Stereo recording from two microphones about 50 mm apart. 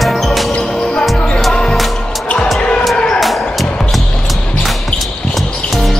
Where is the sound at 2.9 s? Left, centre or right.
Centre.